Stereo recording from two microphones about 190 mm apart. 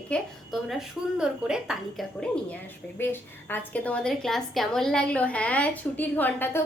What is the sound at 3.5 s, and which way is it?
A woman's voice, 5° left (ahead or behind).